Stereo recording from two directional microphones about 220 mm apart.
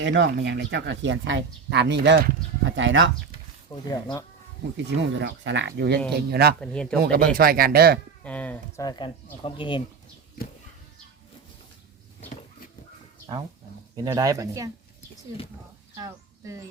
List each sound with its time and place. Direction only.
0.0 s speech: 55° right (ahead or behind)
3.7 s speech: 15° left (ahead or behind)
4.9 s speech: 55° right (ahead or behind)
6.6 s speech: 5° left (ahead or behind)
7.0 s speech: 45° right (ahead or behind)
8.2 s speech: 5° left (ahead or behind); by 9.8 s 20° left (ahead or behind)
13.9 s speech: 15° right (ahead or behind)
16.0 s speech: 15° right (ahead or behind)